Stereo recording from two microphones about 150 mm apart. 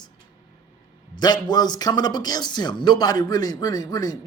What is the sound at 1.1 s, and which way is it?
A man's voice, 30° left (ahead or behind).